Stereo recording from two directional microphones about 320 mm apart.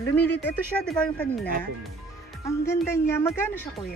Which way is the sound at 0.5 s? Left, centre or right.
Centre.